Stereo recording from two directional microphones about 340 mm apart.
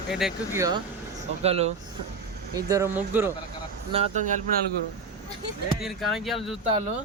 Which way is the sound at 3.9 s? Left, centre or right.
Centre.